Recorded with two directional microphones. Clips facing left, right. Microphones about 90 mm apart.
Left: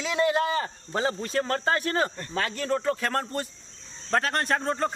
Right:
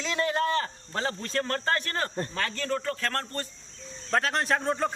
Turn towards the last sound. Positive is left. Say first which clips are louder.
# even
turn(degrees=0)  # may be behind; listen again after turning